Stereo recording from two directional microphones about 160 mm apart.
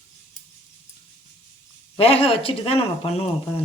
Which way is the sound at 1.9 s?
35° left (ahead or behind).